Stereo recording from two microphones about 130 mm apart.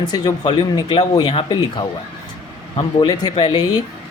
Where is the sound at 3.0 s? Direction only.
30° left (ahead or behind).